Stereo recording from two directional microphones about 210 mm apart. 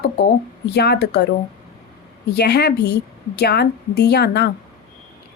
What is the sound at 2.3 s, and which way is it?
A woman's voice, 50° left (ahead or behind).